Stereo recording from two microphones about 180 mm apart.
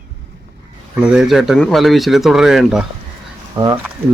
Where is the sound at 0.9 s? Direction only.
5° right (ahead or behind).